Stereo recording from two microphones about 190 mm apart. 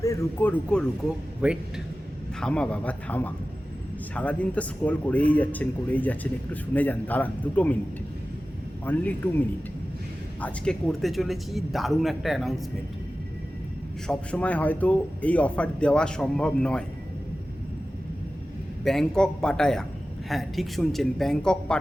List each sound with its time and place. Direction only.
0.0 s speech: 15° left (ahead or behind)
1.4 s speech: 5° right (ahead or behind)
2.4 s speech: 5° left (ahead or behind)
8.8 s speech: 10° left (ahead or behind)
10.4 s speech: 5° left (ahead or behind)
14.1 s speech: 5° left (ahead or behind)
18.9 s speech: 5° left (ahead or behind)